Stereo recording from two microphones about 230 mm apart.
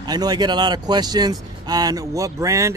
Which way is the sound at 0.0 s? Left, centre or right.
Centre.